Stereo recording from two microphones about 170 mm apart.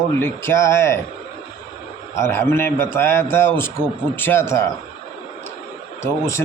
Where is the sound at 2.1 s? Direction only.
15° left (ahead or behind).